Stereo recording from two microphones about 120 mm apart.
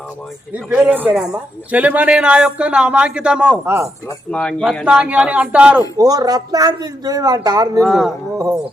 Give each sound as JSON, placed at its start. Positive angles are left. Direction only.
{"t": 0.5, "sound": "speech", "side_deg": -10}
{"t": 3.6, "sound": "speech", "side_deg": -20}
{"t": 4.3, "sound": "a man's voice", "side_deg": 10}
{"t": 4.9, "sound": "speech", "side_deg": -10}
{"t": 6.0, "sound": "speech", "side_deg": -30}
{"t": 7.8, "sound": "speech", "side_deg": 0}